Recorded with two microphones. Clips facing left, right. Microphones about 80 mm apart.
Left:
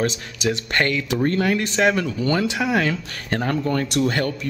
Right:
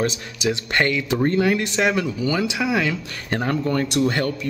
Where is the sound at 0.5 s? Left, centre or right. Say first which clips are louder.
Even; centre.